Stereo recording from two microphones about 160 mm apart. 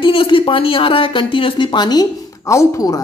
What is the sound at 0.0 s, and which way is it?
A woman's voice, 35° left (ahead or behind).